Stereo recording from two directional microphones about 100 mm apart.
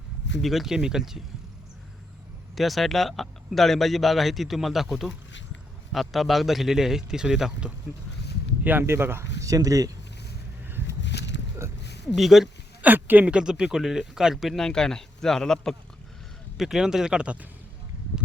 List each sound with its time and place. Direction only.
0.4 s speech: centre (ahead or behind)
2.6 s speech: centre (ahead or behind)
8.6 s speech: 20° right (ahead or behind); by 9.9 s 35° right (ahead or behind)
10.7 s a sound: 20° right (ahead or behind)
12.1 s speech: centre (ahead or behind)
12.8 s speech: 15° right (ahead or behind)